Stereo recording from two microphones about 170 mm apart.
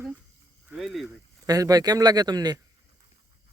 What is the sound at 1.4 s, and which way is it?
A man's voice, 20° right (ahead or behind).